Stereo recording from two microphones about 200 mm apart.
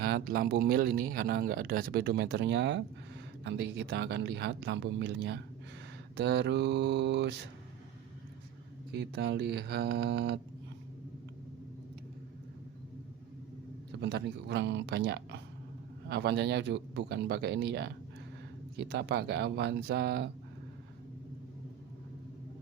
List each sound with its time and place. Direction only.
0.0 s speech: 50° right (ahead or behind)
8.9 s speech: 55° right (ahead or behind)
14.0 s speech: 55° right (ahead or behind)